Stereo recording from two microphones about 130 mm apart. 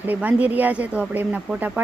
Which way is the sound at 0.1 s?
10° right (ahead or behind).